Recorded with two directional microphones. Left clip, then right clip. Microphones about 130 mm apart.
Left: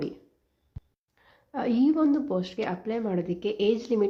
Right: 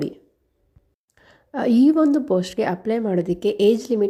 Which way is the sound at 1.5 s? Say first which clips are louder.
Right 7 dB; 45° right (ahead or behind).